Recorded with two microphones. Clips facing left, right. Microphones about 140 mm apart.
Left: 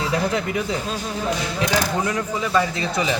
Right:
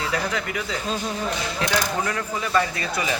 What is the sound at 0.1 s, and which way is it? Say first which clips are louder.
Speech: left 4 dB; 25° left (ahead or behind).